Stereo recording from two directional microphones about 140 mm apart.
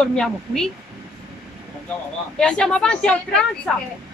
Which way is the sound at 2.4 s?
5° left (ahead or behind).